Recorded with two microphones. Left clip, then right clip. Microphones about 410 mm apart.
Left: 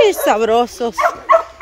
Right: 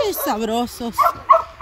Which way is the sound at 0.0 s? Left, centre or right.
Centre.